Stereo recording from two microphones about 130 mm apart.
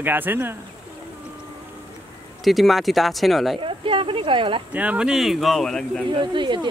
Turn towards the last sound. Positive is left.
turn(degrees=-35)  # may be behind; listen again after turning